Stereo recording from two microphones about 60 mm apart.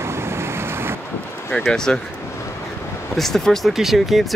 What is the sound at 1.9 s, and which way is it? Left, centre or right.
Speech, centre.